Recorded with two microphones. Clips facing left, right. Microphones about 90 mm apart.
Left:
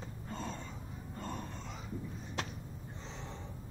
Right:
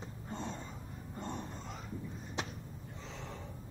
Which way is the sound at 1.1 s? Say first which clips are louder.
Right 1 dB; 20° right (ahead or behind).